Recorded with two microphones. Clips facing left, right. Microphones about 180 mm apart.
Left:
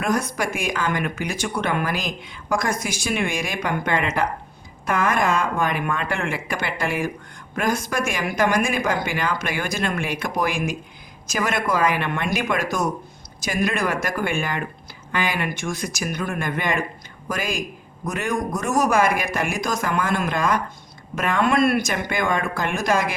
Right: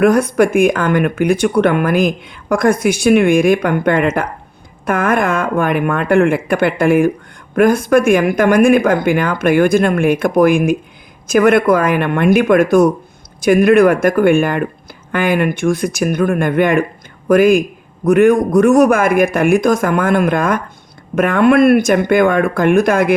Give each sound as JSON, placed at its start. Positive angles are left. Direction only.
{"t": 0.0, "sound": "speech", "side_deg": -60}